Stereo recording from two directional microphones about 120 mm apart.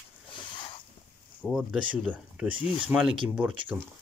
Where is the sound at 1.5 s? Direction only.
5° right (ahead or behind).